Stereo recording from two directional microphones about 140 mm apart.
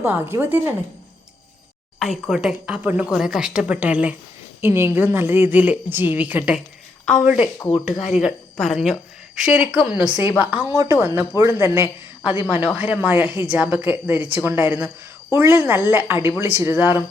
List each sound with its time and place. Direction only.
0.0 s speech: 15° right (ahead or behind)
2.0 s a woman's voice: centre (ahead or behind); by 17.0 s 15° right (ahead or behind)